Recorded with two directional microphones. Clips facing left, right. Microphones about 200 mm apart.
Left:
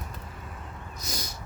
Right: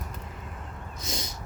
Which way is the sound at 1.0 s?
25° right (ahead or behind).